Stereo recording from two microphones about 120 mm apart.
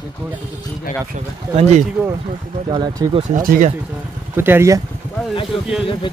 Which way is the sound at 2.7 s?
40° right (ahead or behind).